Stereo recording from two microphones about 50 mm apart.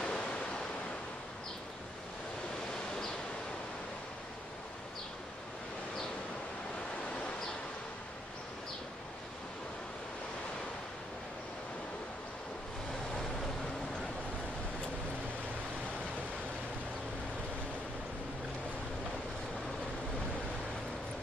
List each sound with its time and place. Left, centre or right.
0.0 s waves: left